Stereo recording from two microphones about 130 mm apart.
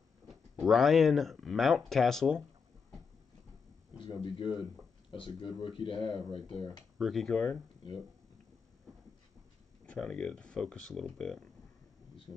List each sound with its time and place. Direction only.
0.7 s speech: centre (ahead or behind)
4.0 s speech: 40° left (ahead or behind)
7.0 s speech: centre (ahead or behind)
9.8 s speech: 10° left (ahead or behind)